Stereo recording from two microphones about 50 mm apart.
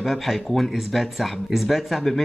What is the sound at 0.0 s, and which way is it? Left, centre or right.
Speech, centre.